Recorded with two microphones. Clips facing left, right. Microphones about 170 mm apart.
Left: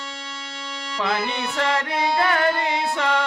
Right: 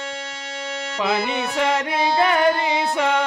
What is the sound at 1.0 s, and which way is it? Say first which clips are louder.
Music: right 2 dB; 15° right (ahead or behind).